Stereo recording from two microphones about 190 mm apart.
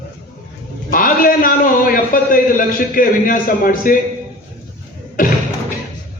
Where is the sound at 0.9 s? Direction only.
45° left (ahead or behind).